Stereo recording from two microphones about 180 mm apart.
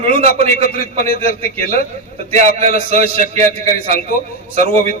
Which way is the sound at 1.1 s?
55° left (ahead or behind).